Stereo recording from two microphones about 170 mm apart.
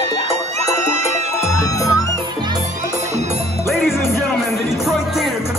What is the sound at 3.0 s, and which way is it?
Music, 40° right (ahead or behind).